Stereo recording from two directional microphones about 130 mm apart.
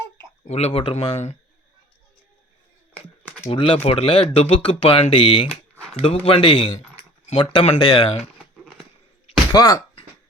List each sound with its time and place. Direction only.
0.4 s speech: 55° left (ahead or behind)
1.1 s speech: 60° left (ahead or behind)
3.5 s speech: 45° left (ahead or behind)
9.5 s speech: 30° left (ahead or behind)